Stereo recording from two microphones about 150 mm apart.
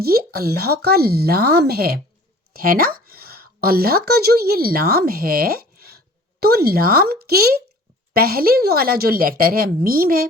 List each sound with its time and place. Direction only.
0.0 s speech: 90° right
2.5 s a woman's voice: 75° right (ahead or behind)